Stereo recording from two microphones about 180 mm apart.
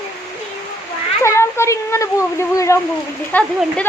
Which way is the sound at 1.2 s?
15° left (ahead or behind).